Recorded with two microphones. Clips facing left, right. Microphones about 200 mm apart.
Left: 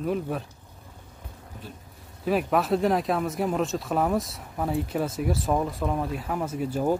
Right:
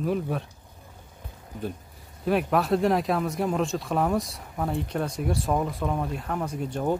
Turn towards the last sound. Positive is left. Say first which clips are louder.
# left 2 dB
turn(degrees=0)  # may be behind; listen again after turning